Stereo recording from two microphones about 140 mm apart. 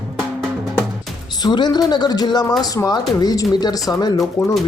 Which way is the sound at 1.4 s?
30° left (ahead or behind).